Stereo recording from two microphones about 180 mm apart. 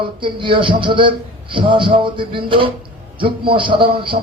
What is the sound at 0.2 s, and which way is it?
Speech, 30° right (ahead or behind).